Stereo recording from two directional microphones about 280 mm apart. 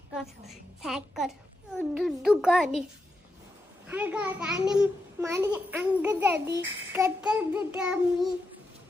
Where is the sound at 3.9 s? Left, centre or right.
Centre.